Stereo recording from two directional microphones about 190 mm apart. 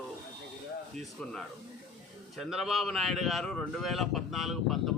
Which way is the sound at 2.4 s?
Centre (ahead or behind).